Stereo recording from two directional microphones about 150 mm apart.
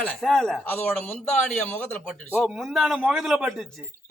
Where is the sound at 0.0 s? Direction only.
5° left (ahead or behind).